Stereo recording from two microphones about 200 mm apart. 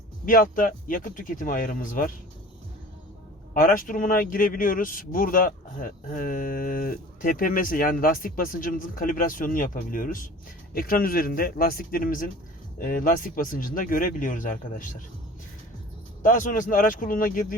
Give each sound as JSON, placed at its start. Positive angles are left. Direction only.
{"t": 0.3, "sound": "speech", "side_deg": 45}
{"t": 3.5, "sound": "speech", "side_deg": 45}
{"t": 16.2, "sound": "speech", "side_deg": 40}